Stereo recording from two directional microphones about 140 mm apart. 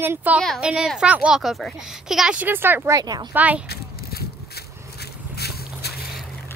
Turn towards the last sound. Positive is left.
turn(degrees=90)